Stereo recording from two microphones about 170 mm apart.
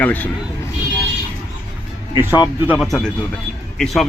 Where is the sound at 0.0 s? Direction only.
10° left (ahead or behind).